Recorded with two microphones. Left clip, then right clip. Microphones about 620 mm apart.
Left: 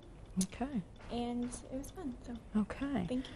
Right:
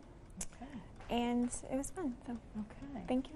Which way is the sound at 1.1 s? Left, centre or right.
Right.